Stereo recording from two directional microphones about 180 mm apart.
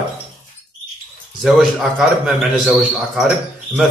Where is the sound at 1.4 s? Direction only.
Centre (ahead or behind).